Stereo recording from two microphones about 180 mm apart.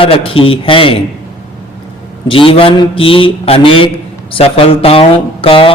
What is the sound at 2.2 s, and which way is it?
A man's voice, 30° left (ahead or behind).